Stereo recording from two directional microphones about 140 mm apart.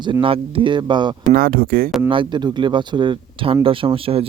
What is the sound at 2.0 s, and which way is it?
Speech, 35° right (ahead or behind).